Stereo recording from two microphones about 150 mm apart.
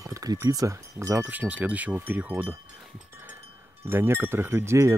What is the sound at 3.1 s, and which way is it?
Wind chime, 15° right (ahead or behind).